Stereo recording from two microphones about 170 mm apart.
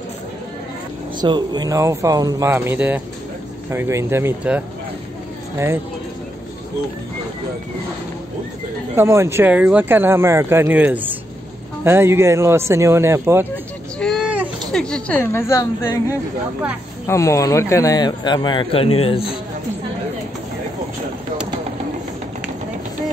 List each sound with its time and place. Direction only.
1.2 s speech: 25° right (ahead or behind)
8.9 s speech: 15° right (ahead or behind)
13.9 s vehicle: centre (ahead or behind)
14.7 s a woman's voice: 5° left (ahead or behind); by 19.3 s 35° left (ahead or behind)